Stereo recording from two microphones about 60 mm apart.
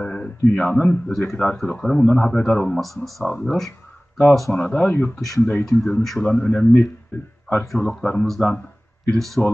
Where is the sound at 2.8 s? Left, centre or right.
Centre.